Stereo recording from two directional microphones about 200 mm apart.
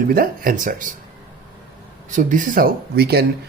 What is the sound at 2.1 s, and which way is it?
Speech, 40° right (ahead or behind).